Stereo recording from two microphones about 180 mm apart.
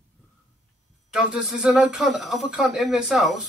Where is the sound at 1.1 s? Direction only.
5° right (ahead or behind).